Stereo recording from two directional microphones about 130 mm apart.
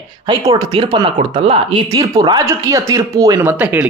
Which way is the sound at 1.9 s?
30° right (ahead or behind).